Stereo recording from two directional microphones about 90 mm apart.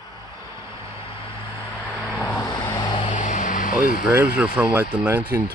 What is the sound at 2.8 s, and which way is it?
Vehicle, 60° left (ahead or behind).